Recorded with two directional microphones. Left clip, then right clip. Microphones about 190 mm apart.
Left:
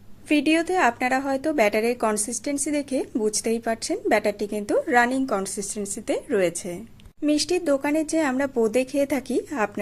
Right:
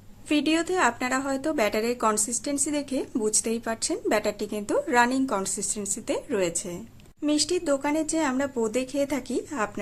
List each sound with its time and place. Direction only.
0.3 s a woman's voice: 15° left (ahead or behind)